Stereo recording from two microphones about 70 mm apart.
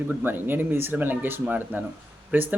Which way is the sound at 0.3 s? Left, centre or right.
Right.